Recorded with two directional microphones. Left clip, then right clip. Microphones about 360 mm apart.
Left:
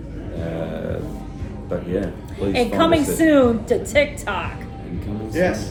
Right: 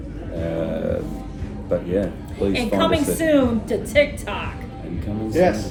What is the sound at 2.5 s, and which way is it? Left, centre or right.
A woman's voice, centre.